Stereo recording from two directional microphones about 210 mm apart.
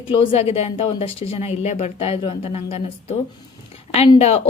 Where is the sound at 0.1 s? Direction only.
25° left (ahead or behind).